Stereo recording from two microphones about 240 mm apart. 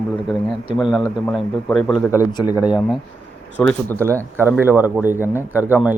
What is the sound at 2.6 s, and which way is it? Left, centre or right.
A man's voice, centre.